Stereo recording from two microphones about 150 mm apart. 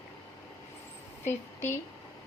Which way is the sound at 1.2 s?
15° left (ahead or behind).